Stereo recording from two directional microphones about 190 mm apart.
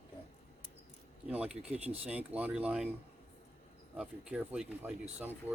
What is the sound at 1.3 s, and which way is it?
Speech, 5° right (ahead or behind).